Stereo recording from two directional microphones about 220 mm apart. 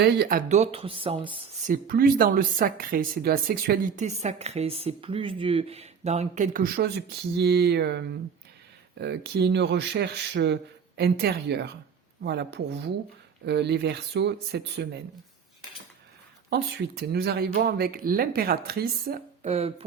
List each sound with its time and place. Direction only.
0.0 s speech: 45° right (ahead or behind); by 1.5 s 25° right (ahead or behind)
1.6 s speech: 40° right (ahead or behind)
16.5 s speech: 45° right (ahead or behind)
19.5 s speech: 30° right (ahead or behind)